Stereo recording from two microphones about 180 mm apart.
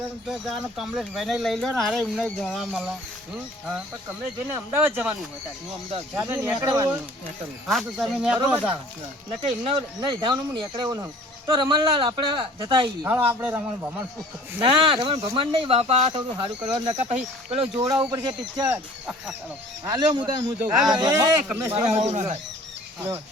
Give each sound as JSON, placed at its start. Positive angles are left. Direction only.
{"t": 0.3, "sound": "speech", "side_deg": 0}
{"t": 4.7, "sound": "speech", "side_deg": -10}
{"t": 6.2, "sound": "speech", "side_deg": -15}
{"t": 7.7, "sound": "speech", "side_deg": 0}
{"t": 9.4, "sound": "speech", "side_deg": -40}
{"t": 10.0, "sound": "speech", "side_deg": -25}
{"t": 13.1, "sound": "speech", "side_deg": -10}
{"t": 14.6, "sound": "speech", "side_deg": -30}
{"t": 16.8, "sound": "speech", "side_deg": -40}
{"t": 17.7, "sound": "speech", "side_deg": -20}
{"t": 19.8, "sound": "speech", "side_deg": -20}
{"t": 20.1, "sound": "speech", "side_deg": -35}
{"t": 21.0, "sound": "speech", "side_deg": -20}
{"t": 21.7, "sound": "speech", "side_deg": -35}